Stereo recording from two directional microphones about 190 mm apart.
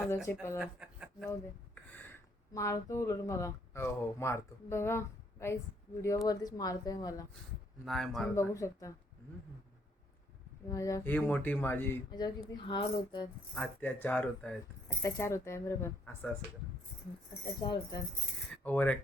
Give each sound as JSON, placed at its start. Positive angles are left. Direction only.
{"t": 0.0, "sound": "speech", "side_deg": 10}
{"t": 0.6, "sound": "speech", "side_deg": -5}
{"t": 1.3, "sound": "a sound", "side_deg": 10}
{"t": 2.5, "sound": "a woman's voice", "side_deg": 15}
{"t": 7.9, "sound": "speech", "side_deg": 0}
{"t": 8.4, "sound": "speech", "side_deg": 15}
{"t": 10.7, "sound": "speech", "side_deg": 15}
{"t": 12.1, "sound": "a woman's voice", "side_deg": 20}
{"t": 13.5, "sound": "speech", "side_deg": 5}
{"t": 17.6, "sound": "a woman's voice", "side_deg": 25}
{"t": 18.5, "sound": "coin", "side_deg": 10}